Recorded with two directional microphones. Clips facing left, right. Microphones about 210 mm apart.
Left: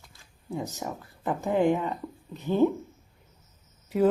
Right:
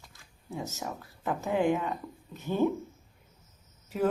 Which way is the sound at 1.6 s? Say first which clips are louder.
Left 3 dB; 15° left (ahead or behind).